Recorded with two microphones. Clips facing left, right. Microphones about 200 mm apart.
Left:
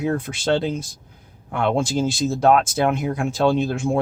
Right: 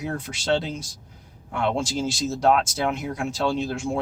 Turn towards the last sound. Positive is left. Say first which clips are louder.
# left 5 dB
turn(degrees=55)  # may be behind; listen again after turning